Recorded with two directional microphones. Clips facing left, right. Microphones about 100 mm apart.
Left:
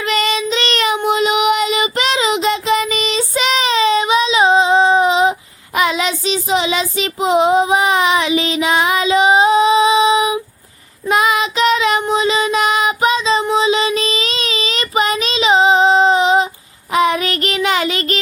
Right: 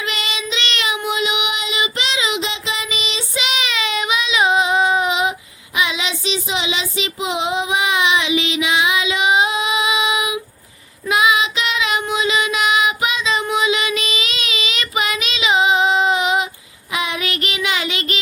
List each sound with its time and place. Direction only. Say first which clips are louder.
0.0 s child singing: left 8 dB; 40° left (ahead or behind)
5.7 s child singing: left 5 dB; 45° left (ahead or behind)
11.1 s child singing: left 2 dB; 45° left (ahead or behind)